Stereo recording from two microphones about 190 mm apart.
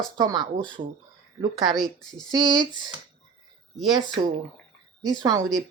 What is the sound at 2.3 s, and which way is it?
Speech, 25° right (ahead or behind).